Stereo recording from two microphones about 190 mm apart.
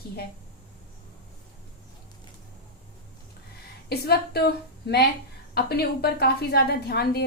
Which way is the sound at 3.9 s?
55° left (ahead or behind).